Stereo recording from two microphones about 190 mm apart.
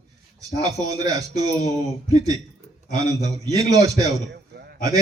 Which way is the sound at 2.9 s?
20° right (ahead or behind).